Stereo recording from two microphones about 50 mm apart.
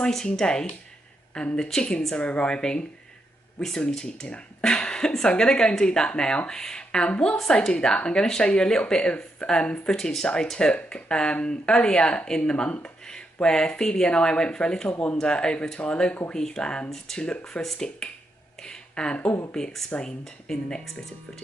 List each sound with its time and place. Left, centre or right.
0.0 s a woman's voice: centre
17.6 s speech: centre
18.6 s a sound: centre
19.5 s a woman's voice: centre